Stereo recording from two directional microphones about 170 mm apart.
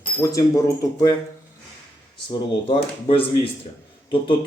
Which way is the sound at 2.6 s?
30° left (ahead or behind).